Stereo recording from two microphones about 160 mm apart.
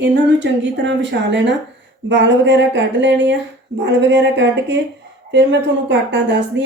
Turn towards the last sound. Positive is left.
turn(degrees=-90)